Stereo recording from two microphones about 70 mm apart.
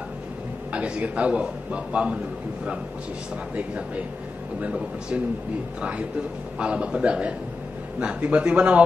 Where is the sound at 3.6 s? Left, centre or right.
Centre.